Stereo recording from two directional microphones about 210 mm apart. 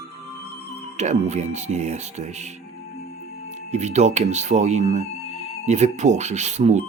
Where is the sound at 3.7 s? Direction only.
35° right (ahead or behind).